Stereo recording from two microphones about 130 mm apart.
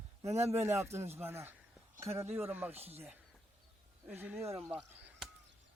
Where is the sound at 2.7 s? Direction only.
50° right (ahead or behind).